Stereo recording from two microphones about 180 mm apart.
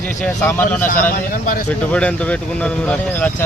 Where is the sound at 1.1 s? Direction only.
55° left (ahead or behind).